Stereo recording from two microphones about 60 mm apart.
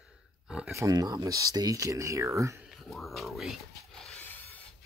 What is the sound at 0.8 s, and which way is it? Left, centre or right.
Speech, right.